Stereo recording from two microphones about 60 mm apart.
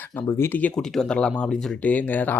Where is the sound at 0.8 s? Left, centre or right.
Centre.